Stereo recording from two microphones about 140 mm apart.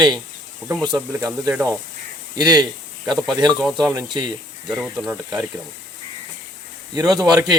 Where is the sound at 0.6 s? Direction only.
10° right (ahead or behind).